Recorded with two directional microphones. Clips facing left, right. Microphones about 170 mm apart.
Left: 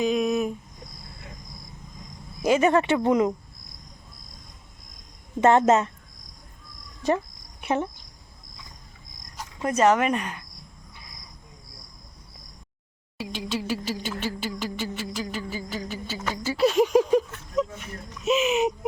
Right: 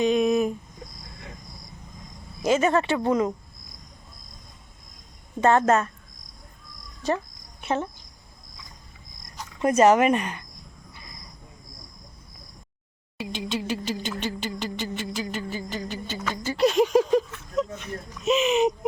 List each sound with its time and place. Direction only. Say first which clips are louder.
0.0 s a sound: right 2 dB; centre (ahead or behind)
2.4 s speech: left 1 dB; 15° left (ahead or behind)
5.4 s speech: left 1 dB; 20° left (ahead or behind)
7.6 s speech: left 1 dB; 15° left (ahead or behind)
9.6 s speech: right 3 dB; 5° right (ahead or behind)
13.1 s a sound: even; 5° left (ahead or behind)